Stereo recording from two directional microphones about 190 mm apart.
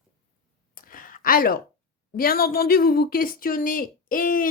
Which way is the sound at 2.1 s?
50° left (ahead or behind).